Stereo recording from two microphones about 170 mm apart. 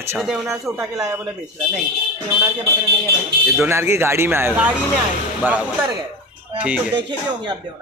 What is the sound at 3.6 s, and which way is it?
Speech, 15° right (ahead or behind).